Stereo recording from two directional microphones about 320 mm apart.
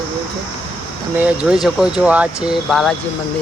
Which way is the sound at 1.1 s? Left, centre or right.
Centre.